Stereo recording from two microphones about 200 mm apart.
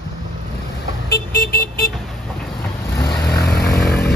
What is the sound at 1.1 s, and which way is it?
Vehicle, 50° left (ahead or behind).